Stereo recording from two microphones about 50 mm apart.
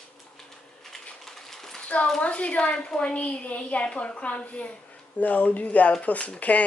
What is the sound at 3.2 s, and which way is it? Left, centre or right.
A woman's voice, left.